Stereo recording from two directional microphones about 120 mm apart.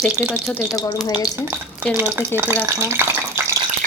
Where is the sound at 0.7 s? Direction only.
30° left (ahead or behind).